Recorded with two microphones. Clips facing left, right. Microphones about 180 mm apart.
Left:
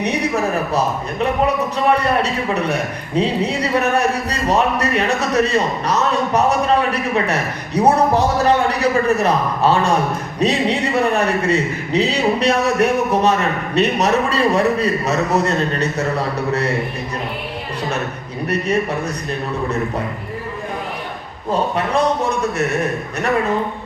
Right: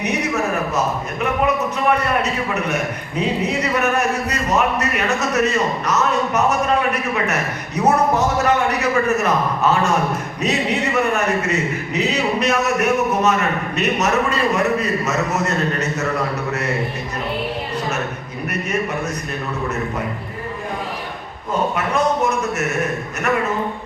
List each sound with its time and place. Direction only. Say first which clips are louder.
1.2 s speech: left 2 dB; 30° left (ahead or behind)
21.5 s speech: left 2 dB; 30° left (ahead or behind)